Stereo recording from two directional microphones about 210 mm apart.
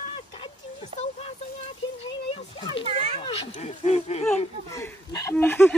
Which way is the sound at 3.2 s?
30° left (ahead or behind).